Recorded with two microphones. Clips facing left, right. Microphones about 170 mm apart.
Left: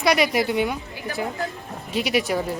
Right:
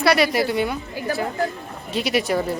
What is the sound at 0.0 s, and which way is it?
Speech, 15° left (ahead or behind).